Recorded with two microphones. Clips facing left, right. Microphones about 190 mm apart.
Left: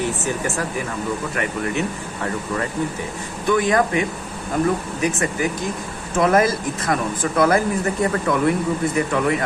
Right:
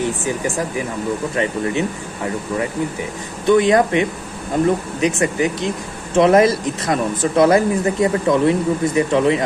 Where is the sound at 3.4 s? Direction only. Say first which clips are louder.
Right 5 dB; 20° right (ahead or behind).